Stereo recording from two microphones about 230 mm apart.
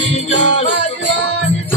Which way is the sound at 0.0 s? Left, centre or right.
Left.